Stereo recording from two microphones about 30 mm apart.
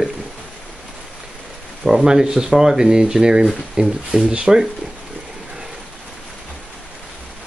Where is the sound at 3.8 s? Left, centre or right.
Right.